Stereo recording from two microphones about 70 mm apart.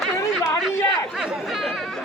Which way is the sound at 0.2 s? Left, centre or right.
Left.